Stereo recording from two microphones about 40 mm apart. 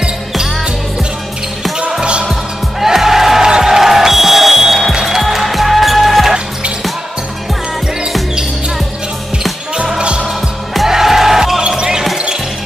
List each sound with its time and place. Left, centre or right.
1.9 s music: right
2.8 s music: centre
9.9 s music: right
10.9 s music: centre
11.6 s basketball bounce: right